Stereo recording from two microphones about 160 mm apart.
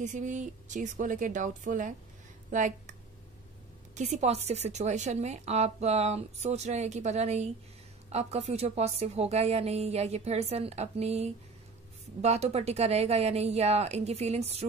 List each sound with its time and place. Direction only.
0.0 s a woman's voice: 50° right (ahead or behind)